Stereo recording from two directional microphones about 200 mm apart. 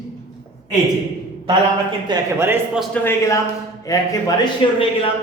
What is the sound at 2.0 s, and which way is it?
Speech, 15° right (ahead or behind).